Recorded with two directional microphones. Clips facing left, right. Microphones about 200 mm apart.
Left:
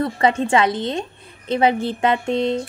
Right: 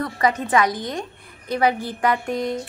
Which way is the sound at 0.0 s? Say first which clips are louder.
Left 3 dB; 25° left (ahead or behind).